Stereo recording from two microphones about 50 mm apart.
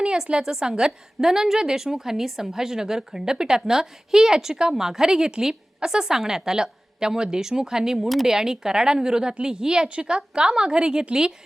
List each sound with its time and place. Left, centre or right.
0.0 s a woman's voice: centre